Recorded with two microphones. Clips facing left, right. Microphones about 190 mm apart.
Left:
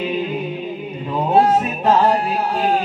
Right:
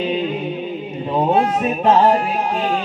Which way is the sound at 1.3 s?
35° left (ahead or behind).